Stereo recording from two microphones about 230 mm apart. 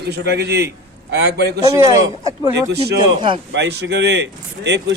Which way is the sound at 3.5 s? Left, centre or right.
Right.